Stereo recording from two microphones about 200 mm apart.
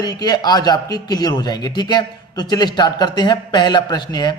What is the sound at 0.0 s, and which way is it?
Speech, 20° left (ahead or behind).